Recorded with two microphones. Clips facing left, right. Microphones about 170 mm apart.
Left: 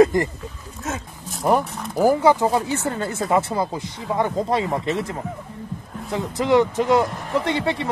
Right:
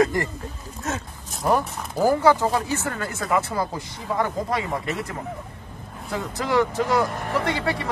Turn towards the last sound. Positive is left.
turn(degrees=20)  # may be behind; listen again after turning